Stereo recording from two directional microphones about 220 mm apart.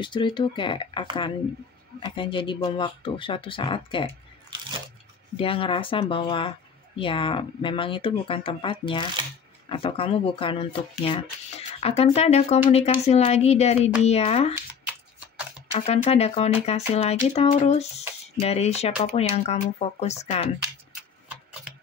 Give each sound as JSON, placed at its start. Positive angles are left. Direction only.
{"t": 0.0, "sound": "speech", "side_deg": 20}
{"t": 5.4, "sound": "speech", "side_deg": 25}
{"t": 15.7, "sound": "speech", "side_deg": 25}